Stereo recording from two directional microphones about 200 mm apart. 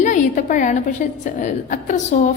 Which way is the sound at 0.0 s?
40° left (ahead or behind).